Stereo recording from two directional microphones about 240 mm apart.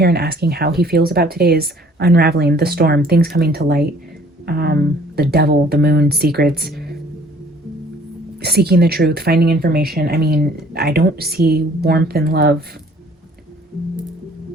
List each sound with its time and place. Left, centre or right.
0.0 s speech: right
8.4 s speech: right